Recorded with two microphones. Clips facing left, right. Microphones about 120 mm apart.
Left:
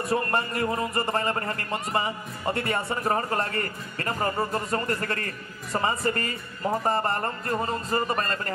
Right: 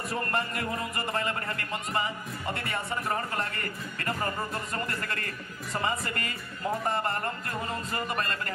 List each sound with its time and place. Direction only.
0.1 s speech: 40° left (ahead or behind)